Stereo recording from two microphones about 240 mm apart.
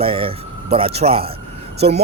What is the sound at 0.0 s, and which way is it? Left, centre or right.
Speech, right.